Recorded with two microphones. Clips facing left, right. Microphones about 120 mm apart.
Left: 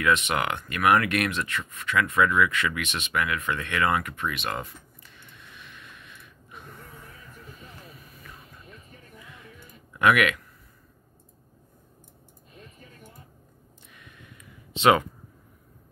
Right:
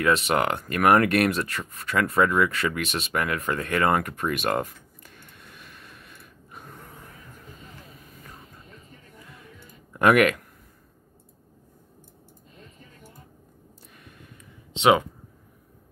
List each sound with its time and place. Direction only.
0.0 s speech: 35° right (ahead or behind)
9.9 s speech: 40° right (ahead or behind)
13.9 s a sound: 40° right (ahead or behind)
14.8 s speech: 15° right (ahead or behind)